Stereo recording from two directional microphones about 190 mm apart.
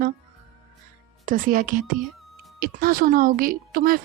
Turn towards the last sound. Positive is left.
turn(degrees=-50)  # may be behind; listen again after turning